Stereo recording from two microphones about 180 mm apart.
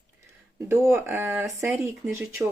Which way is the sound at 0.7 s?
15° right (ahead or behind).